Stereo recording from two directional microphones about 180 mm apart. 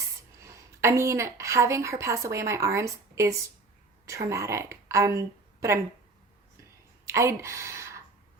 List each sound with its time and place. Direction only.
0.2 s a woman's voice: 15° right (ahead or behind)
7.0 s speech: 15° right (ahead or behind)